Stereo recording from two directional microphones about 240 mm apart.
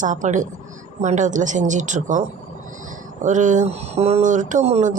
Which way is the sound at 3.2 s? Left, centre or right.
Right.